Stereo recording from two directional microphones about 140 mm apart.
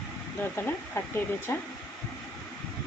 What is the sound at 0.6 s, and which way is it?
Speech, 15° left (ahead or behind).